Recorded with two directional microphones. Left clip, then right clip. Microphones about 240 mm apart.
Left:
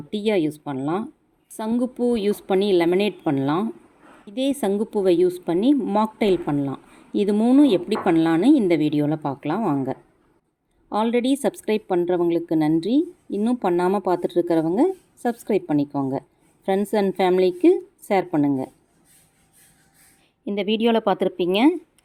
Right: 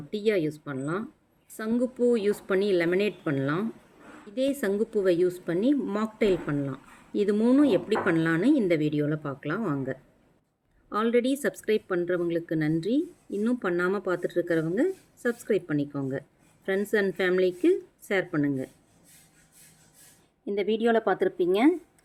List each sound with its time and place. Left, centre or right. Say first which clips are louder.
0.1 s speech: left 4 dB; left
20.4 s speech: left 4 dB; left